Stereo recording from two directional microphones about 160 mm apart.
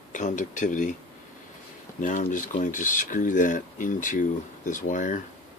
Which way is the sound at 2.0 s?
55° left (ahead or behind).